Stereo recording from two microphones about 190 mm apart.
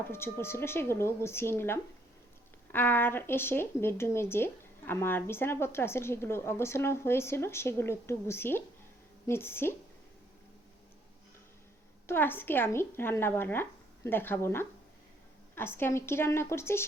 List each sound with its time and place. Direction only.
0.1 s speech: 10° left (ahead or behind)
12.0 s speech: 10° left (ahead or behind)